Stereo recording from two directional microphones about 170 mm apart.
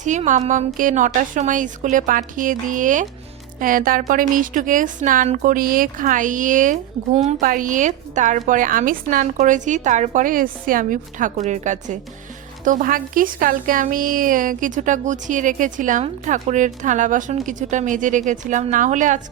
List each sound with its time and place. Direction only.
0.0 s a woman's voice: 45° right (ahead or behind)